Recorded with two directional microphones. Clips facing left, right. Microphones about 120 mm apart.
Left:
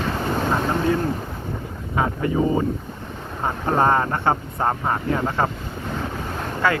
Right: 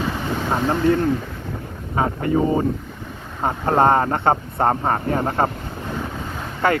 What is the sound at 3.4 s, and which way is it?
Speech, 35° right (ahead or behind).